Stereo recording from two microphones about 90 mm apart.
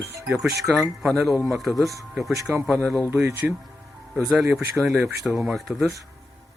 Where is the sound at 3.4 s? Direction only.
15° right (ahead or behind).